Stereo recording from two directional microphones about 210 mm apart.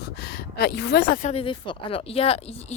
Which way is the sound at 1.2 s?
30° left (ahead or behind).